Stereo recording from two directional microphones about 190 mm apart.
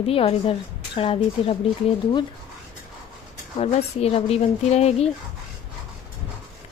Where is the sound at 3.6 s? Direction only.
30° left (ahead or behind).